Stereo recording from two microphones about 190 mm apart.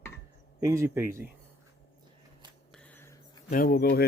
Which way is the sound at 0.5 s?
15° right (ahead or behind).